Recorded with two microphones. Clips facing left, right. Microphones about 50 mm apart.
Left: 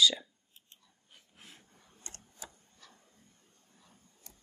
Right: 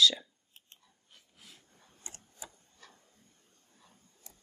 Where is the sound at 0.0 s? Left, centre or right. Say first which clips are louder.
Right 1 dB; centre.